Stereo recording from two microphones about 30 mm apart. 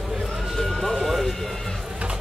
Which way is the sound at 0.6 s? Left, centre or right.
Centre.